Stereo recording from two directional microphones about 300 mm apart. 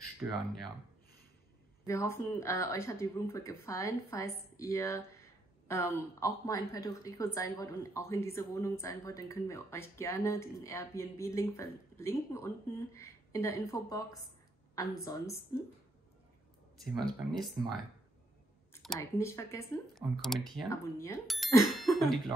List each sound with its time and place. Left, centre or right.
1.9 s a woman's voice: centre
17.3 s speech: centre
18.7 s speech: centre